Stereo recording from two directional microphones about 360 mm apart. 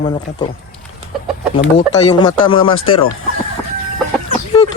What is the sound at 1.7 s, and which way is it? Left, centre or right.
Speech, centre.